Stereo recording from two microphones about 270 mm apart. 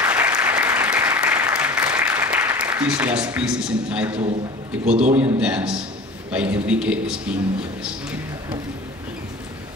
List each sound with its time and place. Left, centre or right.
0.0 s applause: centre
4.8 s a man's voice: right
5.1 s a man's voice: centre